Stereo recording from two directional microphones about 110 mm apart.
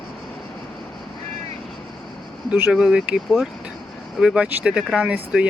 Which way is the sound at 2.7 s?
5° right (ahead or behind).